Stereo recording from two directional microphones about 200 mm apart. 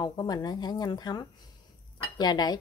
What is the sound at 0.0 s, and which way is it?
Speech, 20° left (ahead or behind).